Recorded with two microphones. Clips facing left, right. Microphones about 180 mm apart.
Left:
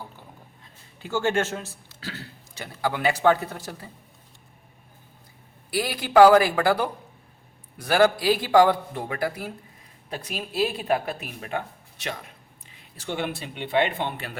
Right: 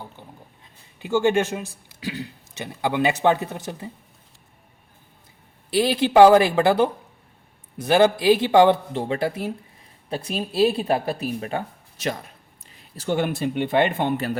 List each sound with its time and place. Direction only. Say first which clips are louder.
0.9 s a man's voice: right 5 dB; 15° right (ahead or behind)
5.7 s a man's voice: right 3 dB; 25° right (ahead or behind); by 14.3 s 45° right (ahead or behind)